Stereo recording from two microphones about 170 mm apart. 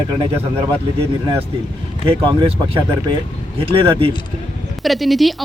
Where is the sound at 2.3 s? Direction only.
30° right (ahead or behind).